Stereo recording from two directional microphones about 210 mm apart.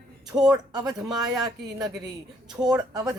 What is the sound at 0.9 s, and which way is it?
Speech, centre (ahead or behind).